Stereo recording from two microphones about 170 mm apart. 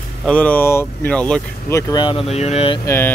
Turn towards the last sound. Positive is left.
turn(degrees=15)  # may be behind; listen again after turning